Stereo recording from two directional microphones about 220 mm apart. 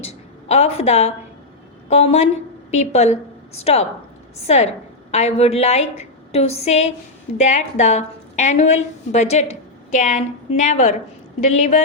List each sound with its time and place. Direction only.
0.0 s a woman's voice: 30° left (ahead or behind)